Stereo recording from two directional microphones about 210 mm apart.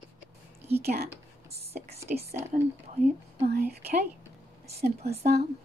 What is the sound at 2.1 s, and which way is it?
Speech, 40° right (ahead or behind).